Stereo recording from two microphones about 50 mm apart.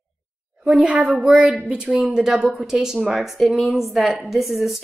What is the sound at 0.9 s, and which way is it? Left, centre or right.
Speech, right.